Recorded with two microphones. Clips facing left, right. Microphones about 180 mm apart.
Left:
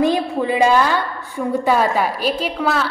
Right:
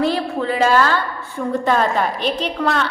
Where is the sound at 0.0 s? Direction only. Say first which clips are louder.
Left 2 dB; 15° left (ahead or behind).